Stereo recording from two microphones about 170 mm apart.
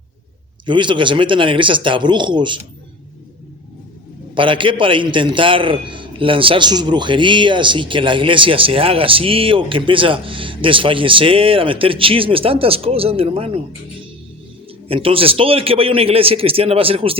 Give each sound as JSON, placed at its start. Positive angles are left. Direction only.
{"t": 0.6, "sound": "speech", "side_deg": -30}
{"t": 4.4, "sound": "a man's voice", "side_deg": -30}
{"t": 14.8, "sound": "a man's voice", "side_deg": -35}